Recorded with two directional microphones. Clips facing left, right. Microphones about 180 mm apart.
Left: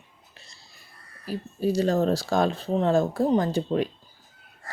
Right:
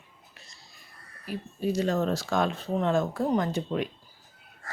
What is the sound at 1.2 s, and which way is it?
Speech, 35° left (ahead or behind).